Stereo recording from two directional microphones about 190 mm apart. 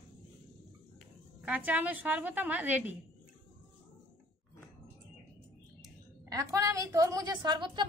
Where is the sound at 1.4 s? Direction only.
10° right (ahead or behind).